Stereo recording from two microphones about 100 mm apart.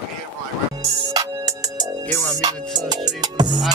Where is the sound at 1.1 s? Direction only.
35° right (ahead or behind).